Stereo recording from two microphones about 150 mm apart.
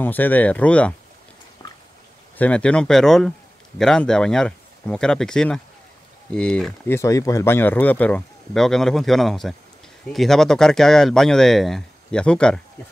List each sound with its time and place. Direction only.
0.0 s speech: 10° left (ahead or behind)
1.6 s drip: 30° left (ahead or behind)
2.3 s a man's voice: 10° left (ahead or behind)
6.9 s speech: 20° left (ahead or behind)